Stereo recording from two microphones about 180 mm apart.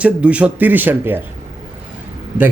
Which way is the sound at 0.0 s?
5° right (ahead or behind).